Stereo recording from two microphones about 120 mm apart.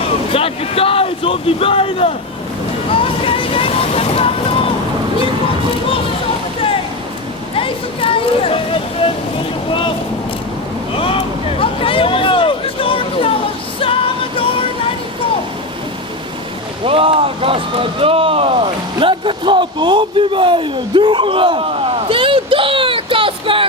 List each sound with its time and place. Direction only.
0.3 s speech: 50° left (ahead or behind)
2.9 s vehicle: 50° left (ahead or behind)
7.5 s a sound: 50° left (ahead or behind)
10.9 s speech: 50° left (ahead or behind)
11.6 s hubbub: 50° left (ahead or behind)
16.8 s speech: 50° right (ahead or behind)
22.1 s a sound: 45° right (ahead or behind)